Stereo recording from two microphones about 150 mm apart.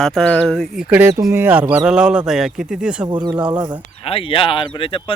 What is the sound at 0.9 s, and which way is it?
Speech, 10° right (ahead or behind).